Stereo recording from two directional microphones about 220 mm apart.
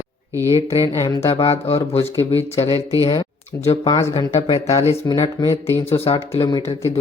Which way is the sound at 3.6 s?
30° left (ahead or behind).